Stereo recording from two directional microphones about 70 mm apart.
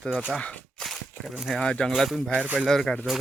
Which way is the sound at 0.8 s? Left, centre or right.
Centre.